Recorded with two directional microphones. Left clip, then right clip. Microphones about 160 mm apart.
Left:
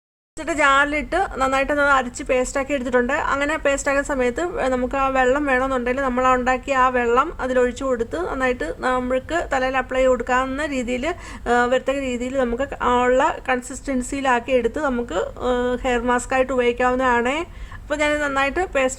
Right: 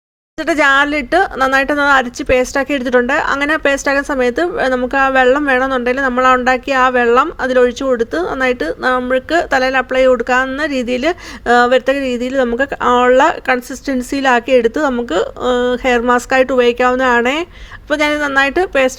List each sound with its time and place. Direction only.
0.4 s a woman's voice: 30° right (ahead or behind)